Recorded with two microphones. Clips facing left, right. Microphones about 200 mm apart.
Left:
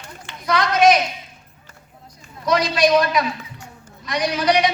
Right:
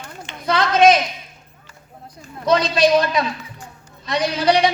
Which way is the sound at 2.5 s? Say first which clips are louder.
Right 1 dB; 25° right (ahead or behind).